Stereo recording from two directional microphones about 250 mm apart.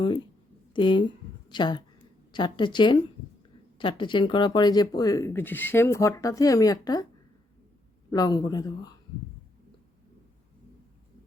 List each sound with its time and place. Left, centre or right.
0.7 s a woman's voice: centre
8.1 s speech: centre